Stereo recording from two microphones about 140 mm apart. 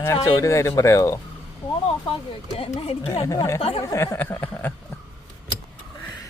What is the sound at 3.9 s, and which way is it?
Speech, 15° left (ahead or behind).